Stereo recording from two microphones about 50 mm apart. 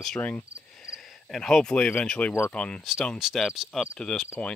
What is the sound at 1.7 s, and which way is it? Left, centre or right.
Speech, left.